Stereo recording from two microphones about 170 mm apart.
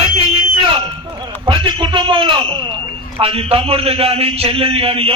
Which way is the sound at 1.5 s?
30° right (ahead or behind).